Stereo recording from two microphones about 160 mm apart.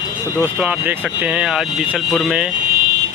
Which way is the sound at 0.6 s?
10° right (ahead or behind).